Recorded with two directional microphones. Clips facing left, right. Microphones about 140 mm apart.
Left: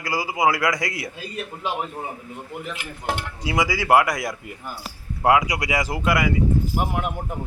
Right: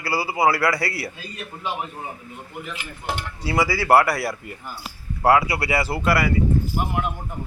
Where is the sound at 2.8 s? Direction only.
55° left (ahead or behind).